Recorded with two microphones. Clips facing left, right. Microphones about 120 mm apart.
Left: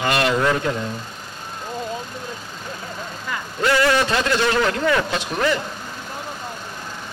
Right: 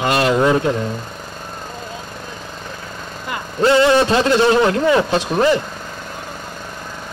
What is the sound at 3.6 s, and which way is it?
A man's voice, 25° right (ahead or behind).